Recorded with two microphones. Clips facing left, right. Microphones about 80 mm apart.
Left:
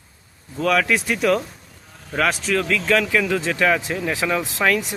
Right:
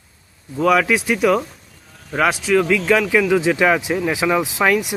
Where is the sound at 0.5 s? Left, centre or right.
Centre.